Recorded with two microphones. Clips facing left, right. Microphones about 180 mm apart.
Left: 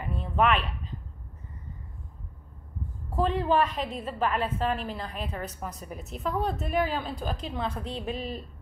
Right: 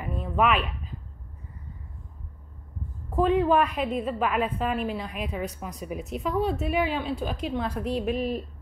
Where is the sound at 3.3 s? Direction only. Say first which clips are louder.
Right 4 dB; 5° right (ahead or behind).